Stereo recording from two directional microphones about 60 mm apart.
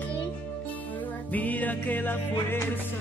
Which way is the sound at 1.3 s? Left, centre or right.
Left.